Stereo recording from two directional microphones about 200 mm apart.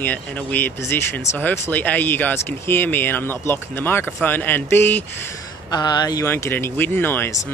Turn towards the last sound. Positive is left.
turn(degrees=15)  # may be behind; listen again after turning